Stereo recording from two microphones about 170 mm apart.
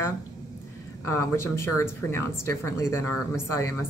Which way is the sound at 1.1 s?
15° left (ahead or behind).